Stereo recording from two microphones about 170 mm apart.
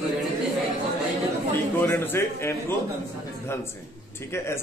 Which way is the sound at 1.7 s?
10° left (ahead or behind).